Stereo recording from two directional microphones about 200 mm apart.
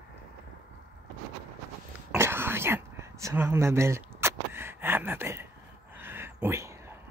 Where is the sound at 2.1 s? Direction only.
10° right (ahead or behind).